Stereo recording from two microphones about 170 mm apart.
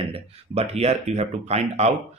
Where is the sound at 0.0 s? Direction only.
35° right (ahead or behind).